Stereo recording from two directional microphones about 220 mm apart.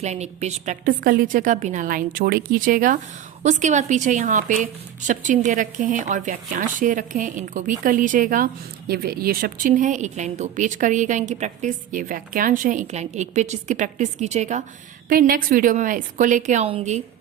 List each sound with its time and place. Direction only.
0.0 s speech: 30° right (ahead or behind)